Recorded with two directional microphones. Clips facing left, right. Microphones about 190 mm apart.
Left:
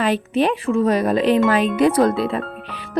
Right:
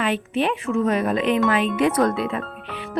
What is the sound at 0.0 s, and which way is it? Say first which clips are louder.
Speech: left 4 dB; 40° left (ahead or behind).